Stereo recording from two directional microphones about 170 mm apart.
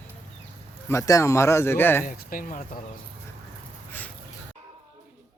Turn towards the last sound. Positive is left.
turn(degrees=10)  # may be behind; listen again after turning